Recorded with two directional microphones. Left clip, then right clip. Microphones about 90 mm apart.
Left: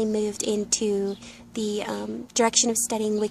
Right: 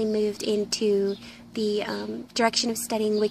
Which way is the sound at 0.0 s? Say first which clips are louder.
Right 1 dB; 35° left (ahead or behind).